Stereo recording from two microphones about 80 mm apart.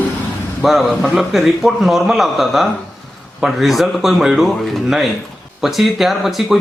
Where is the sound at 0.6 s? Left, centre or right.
Centre.